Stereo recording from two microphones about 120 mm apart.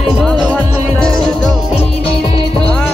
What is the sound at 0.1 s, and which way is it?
Music, 5° right (ahead or behind).